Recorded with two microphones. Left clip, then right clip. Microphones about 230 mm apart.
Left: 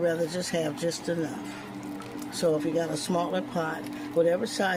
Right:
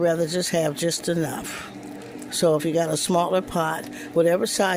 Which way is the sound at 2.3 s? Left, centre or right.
Right.